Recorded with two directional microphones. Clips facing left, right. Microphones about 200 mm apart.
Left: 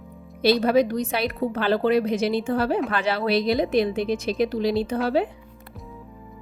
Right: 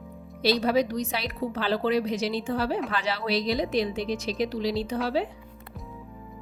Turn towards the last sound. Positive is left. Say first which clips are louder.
# left 5 dB
turn(degrees=55)  # may be behind; listen again after turning